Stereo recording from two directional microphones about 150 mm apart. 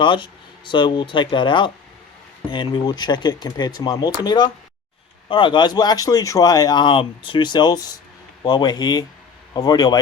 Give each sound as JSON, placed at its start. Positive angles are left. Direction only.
{"t": 0.0, "sound": "speech", "side_deg": 30}